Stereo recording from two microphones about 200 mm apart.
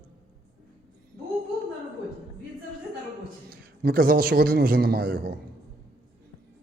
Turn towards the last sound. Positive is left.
turn(degrees=-50)  # may be behind; listen again after turning